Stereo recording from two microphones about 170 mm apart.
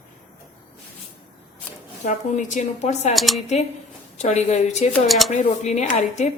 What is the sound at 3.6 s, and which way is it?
A woman's voice, 40° left (ahead or behind).